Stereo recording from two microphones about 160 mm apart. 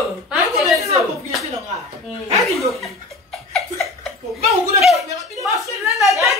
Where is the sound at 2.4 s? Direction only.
Centre (ahead or behind).